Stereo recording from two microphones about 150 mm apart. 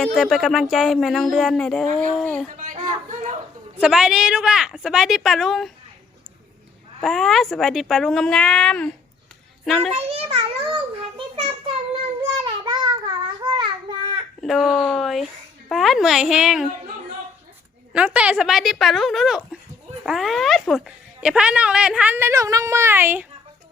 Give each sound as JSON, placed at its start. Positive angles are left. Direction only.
{"t": 0.0, "sound": "speech", "side_deg": 0}
{"t": 2.6, "sound": "speech", "side_deg": -60}
{"t": 3.8, "sound": "speech", "side_deg": -5}
{"t": 7.0, "sound": "speech", "side_deg": 0}
{"t": 10.1, "sound": "a sound", "side_deg": -40}
{"t": 12.2, "sound": "child singing", "side_deg": -30}
{"t": 14.4, "sound": "speech", "side_deg": 0}
{"t": 17.9, "sound": "speech", "side_deg": -10}